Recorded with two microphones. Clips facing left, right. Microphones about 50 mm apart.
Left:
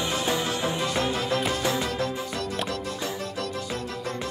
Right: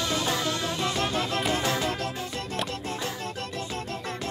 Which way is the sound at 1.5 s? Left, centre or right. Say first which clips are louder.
Even; right.